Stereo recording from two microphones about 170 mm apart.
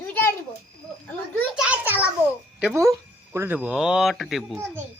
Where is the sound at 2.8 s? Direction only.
15° right (ahead or behind).